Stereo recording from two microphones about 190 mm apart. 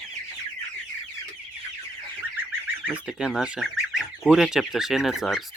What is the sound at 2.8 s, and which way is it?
Fowl, 5° right (ahead or behind).